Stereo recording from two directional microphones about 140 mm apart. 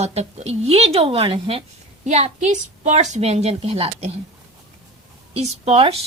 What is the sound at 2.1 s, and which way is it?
A woman's voice, 55° right (ahead or behind).